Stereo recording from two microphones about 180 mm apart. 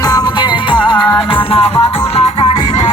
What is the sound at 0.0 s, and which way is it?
Music, 20° left (ahead or behind).